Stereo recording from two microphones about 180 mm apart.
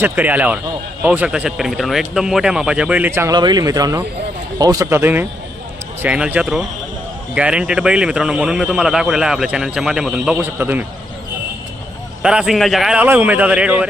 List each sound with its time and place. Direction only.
0.0 s speech: 10° right (ahead or behind)
12.2 s speech: 5° right (ahead or behind)